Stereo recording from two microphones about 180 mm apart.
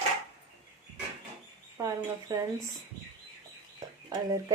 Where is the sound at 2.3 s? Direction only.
20° right (ahead or behind).